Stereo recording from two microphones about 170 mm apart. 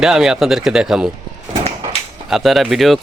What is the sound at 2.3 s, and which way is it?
Speech, centre (ahead or behind).